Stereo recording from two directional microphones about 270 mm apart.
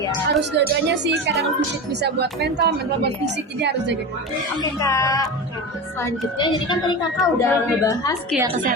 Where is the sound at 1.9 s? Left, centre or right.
Right.